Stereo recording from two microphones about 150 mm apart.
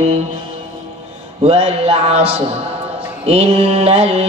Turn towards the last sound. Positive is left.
turn(degrees=-45)  # may be behind; listen again after turning